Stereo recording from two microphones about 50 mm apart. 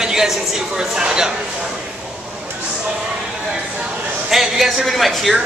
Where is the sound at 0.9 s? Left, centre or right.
Centre.